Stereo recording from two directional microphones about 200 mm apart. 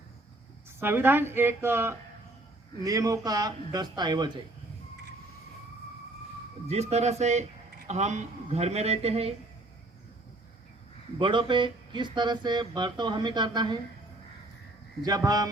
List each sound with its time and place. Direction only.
0.8 s a woman's voice: 10° right (ahead or behind)
6.7 s a man's voice: 35° right (ahead or behind)
11.2 s speech: 25° right (ahead or behind)
15.0 s speech: 20° right (ahead or behind)